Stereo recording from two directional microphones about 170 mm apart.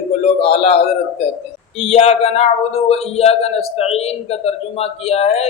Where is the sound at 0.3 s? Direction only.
35° left (ahead or behind).